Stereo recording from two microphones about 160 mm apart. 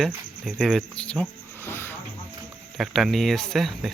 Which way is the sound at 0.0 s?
Centre (ahead or behind).